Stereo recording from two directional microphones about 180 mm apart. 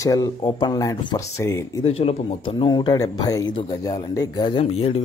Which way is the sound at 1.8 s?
35° left (ahead or behind).